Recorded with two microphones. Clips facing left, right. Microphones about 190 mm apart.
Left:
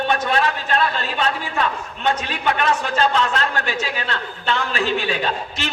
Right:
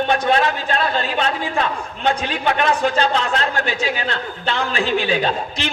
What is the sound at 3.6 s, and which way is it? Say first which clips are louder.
Speech: right 2 dB; 40° left (ahead or behind).